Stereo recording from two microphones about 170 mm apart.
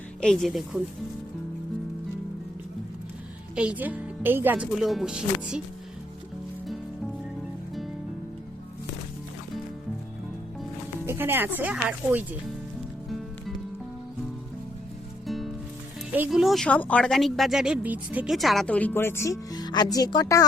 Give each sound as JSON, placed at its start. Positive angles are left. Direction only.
{"t": 0.2, "sound": "a woman's voice", "side_deg": 0}
{"t": 3.5, "sound": "speech", "side_deg": -5}
{"t": 11.0, "sound": "speech", "side_deg": -15}
{"t": 16.1, "sound": "a woman's voice", "side_deg": -5}